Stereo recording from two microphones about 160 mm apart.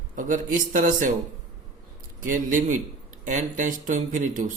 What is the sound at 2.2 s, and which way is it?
A man's voice, 55° right (ahead or behind).